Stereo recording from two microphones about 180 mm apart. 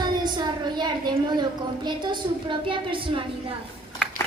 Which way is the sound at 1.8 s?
25° right (ahead or behind).